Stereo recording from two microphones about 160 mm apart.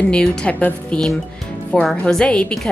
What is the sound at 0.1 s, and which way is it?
A woman's voice, 5° left (ahead or behind).